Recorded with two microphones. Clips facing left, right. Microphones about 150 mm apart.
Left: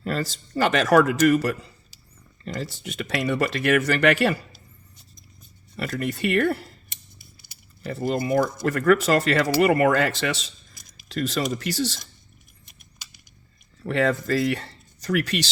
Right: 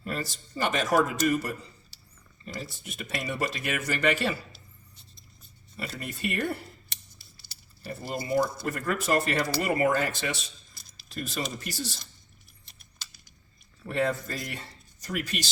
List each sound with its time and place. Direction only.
0.0 s speech: 90° left; by 4.4 s 70° left (ahead or behind)
5.7 s speech: 90° left
7.9 s speech: 90° left
13.8 s speech: 90° left